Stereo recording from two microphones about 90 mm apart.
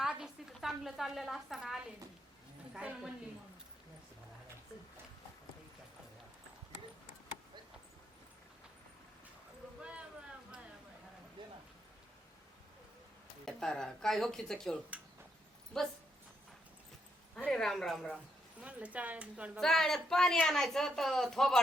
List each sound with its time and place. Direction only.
0.0 s a sound: 5° right (ahead or behind)
2.7 s speech: 10° right (ahead or behind)
11.4 s a sound: 60° right (ahead or behind)
13.4 s speech: 5° left (ahead or behind)
17.3 s speech: 10° left (ahead or behind)
18.6 s speech: 15° right (ahead or behind)
19.5 s speech: 5° left (ahead or behind)